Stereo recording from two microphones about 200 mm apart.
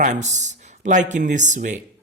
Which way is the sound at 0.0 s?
35° right (ahead or behind).